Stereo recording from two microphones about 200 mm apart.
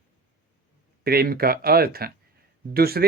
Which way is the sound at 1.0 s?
50° right (ahead or behind).